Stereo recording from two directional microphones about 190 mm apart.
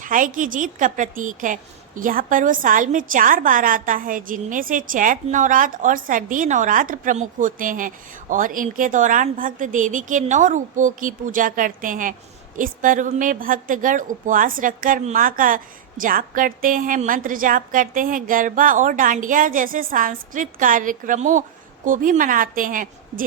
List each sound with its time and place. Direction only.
0.0 s a woman's voice: 45° right (ahead or behind)